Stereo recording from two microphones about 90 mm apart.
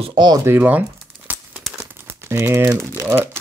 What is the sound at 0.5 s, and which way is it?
Crumpling, 20° right (ahead or behind).